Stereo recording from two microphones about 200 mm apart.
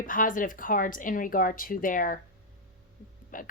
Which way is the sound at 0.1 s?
40° left (ahead or behind).